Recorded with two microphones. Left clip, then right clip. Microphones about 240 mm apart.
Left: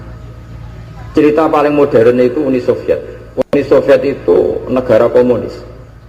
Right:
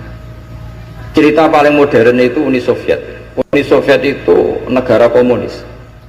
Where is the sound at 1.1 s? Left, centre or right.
Right.